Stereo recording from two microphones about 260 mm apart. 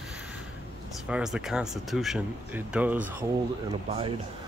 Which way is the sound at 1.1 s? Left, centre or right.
Centre.